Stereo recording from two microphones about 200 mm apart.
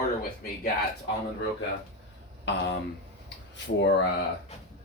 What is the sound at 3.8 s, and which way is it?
Speech, 60° left (ahead or behind).